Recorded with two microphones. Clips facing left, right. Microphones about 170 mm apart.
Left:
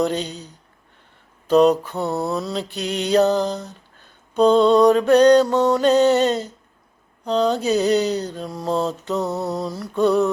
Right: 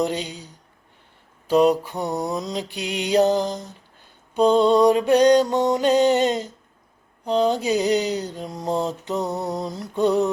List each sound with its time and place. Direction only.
0.0 s mantra: 15° right (ahead or behind)